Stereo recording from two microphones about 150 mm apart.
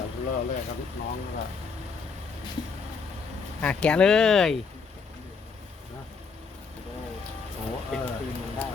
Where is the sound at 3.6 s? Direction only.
5° left (ahead or behind).